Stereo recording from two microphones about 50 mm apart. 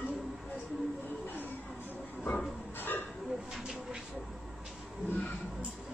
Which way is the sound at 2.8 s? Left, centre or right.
Left.